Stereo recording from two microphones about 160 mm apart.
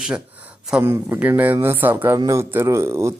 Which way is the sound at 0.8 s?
15° right (ahead or behind).